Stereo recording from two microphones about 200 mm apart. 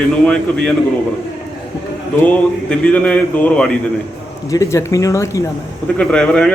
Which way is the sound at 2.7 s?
5° left (ahead or behind).